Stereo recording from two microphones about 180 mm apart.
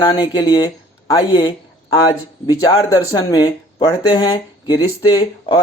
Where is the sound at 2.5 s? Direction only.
20° left (ahead or behind).